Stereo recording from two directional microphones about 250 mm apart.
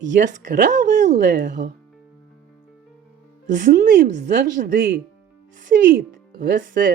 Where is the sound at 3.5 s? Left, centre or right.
Right.